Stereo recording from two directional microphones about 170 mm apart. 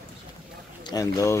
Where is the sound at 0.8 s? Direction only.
20° left (ahead or behind).